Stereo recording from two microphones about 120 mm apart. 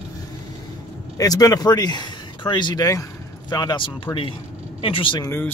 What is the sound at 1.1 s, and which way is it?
Speech, 30° left (ahead or behind).